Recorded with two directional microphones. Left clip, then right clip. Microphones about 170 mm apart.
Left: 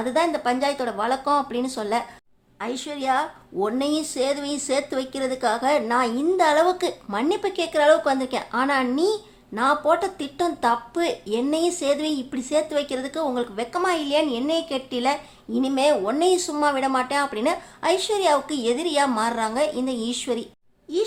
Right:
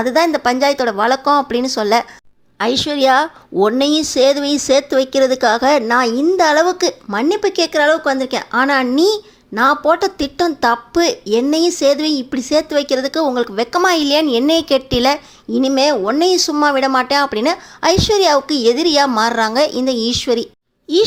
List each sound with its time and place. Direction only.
0.0 s speech: 35° right (ahead or behind)